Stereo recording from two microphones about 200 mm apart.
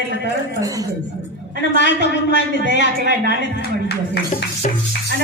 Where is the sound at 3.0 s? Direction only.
55° right (ahead or behind).